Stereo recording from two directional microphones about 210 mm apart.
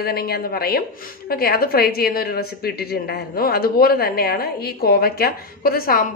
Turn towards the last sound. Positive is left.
turn(degrees=45)  # may be behind; listen again after turning